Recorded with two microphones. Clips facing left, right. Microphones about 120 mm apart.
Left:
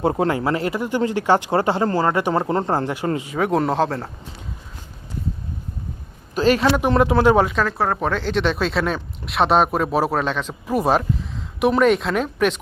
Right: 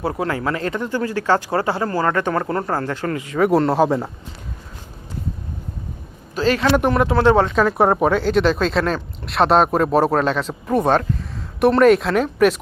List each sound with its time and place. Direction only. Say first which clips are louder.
0.0 s speech: left 3 dB; 25° left (ahead or behind)
3.3 s speech: right 5 dB; centre (ahead or behind)
6.3 s speech: even; 15° left (ahead or behind)
7.5 s speech: right 5 dB; 10° right (ahead or behind)